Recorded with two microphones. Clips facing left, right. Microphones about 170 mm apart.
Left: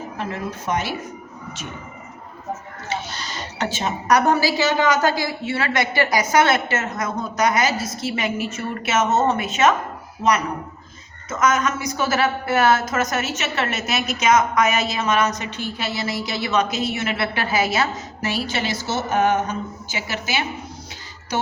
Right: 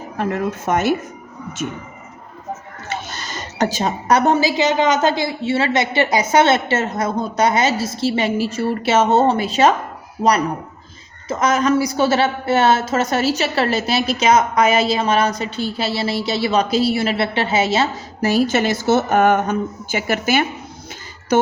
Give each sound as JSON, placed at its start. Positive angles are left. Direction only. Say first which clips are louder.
{"t": 0.2, "sound": "a woman's voice", "louder": "right 8 dB", "side_deg": -50}
{"t": 3.1, "sound": "a sound", "louder": "right 1 dB", "side_deg": -50}
{"t": 4.1, "sound": "a woman's voice", "louder": "right 2 dB", "side_deg": -20}
{"t": 18.2, "sound": "a woman's voice", "louder": "right 9 dB", "side_deg": -40}